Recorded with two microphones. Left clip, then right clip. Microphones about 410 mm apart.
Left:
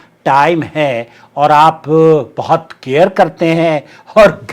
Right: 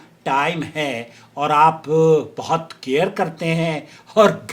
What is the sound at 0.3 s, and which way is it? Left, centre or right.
Speech, left.